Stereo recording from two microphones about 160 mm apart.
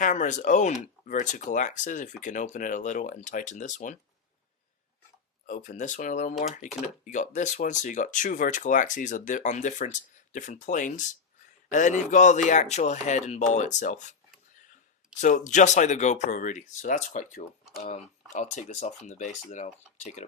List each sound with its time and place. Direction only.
0.0 s speech: 50° left (ahead or behind)
5.5 s speech: 50° left (ahead or behind)
15.2 s speech: 50° left (ahead or behind)